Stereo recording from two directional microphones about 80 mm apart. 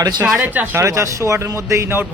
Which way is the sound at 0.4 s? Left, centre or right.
Right.